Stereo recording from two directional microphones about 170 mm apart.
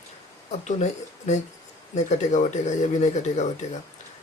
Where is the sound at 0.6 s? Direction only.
45° left (ahead or behind).